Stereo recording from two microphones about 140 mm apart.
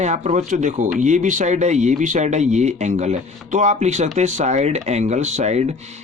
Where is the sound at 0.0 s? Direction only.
60° right (ahead or behind).